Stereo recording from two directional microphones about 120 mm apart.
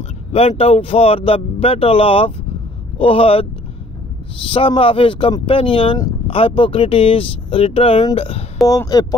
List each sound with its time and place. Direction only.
0.3 s speech: 55° left (ahead or behind)
4.5 s speech: 50° left (ahead or behind)
8.6 s speech: 30° left (ahead or behind)